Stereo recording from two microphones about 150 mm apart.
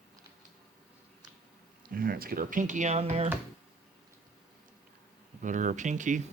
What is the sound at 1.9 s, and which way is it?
Speech, 75° right (ahead or behind).